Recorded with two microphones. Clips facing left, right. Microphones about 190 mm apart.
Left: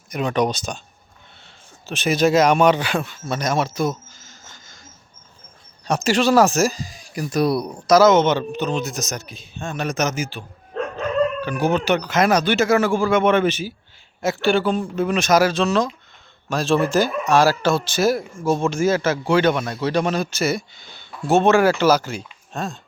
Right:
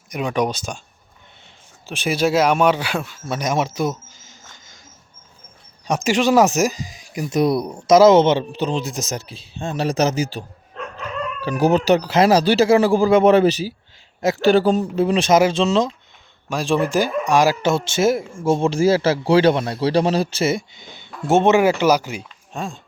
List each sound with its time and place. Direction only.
0.1 s speech: 10° right (ahead or behind)
1.9 s speech: 10° right (ahead or behind)
5.8 s speech: 15° right (ahead or behind)
16.5 s speech: 15° right (ahead or behind)